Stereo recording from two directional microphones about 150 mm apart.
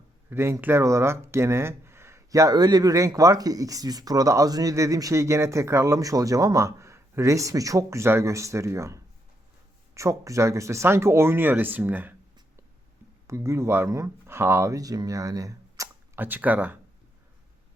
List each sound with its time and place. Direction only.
0.3 s speech: 15° right (ahead or behind)
13.2 s speech: 20° right (ahead or behind)